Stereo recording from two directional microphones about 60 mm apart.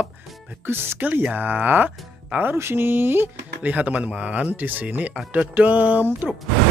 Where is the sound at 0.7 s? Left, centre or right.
Right.